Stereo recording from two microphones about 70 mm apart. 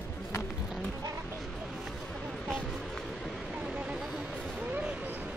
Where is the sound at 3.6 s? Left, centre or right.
Centre.